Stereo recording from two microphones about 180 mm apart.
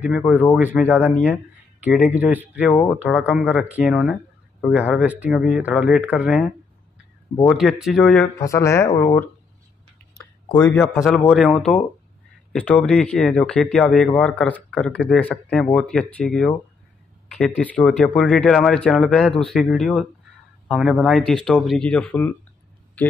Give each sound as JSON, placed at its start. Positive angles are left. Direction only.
{"t": 0.6, "sound": "speech", "side_deg": -10}
{"t": 8.4, "sound": "speech", "side_deg": 15}
{"t": 10.1, "sound": "a sound", "side_deg": 15}
{"t": 11.2, "sound": "speech", "side_deg": 0}